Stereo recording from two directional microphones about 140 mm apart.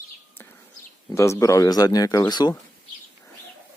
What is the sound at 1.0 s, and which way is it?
Speech, 20° left (ahead or behind).